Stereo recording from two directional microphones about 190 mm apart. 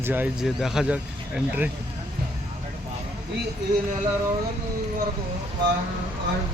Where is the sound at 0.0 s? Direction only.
10° right (ahead or behind).